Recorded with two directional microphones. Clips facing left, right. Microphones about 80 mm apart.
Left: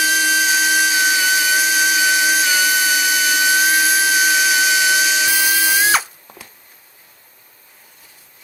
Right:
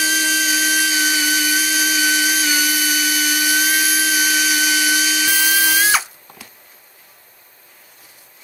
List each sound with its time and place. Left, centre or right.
0.1 s dental drill: centre; by 3.3 s left
3.3 s dental drill: left